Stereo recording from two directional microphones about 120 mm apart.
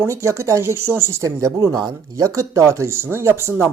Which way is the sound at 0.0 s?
25° right (ahead or behind).